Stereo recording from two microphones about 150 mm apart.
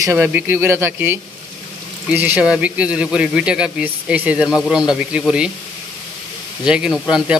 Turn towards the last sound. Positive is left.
turn(degrees=-5)  # may be behind; listen again after turning